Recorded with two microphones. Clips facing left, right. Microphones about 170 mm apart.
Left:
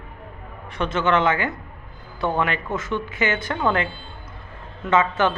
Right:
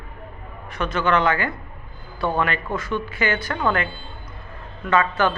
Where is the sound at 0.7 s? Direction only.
25° left (ahead or behind).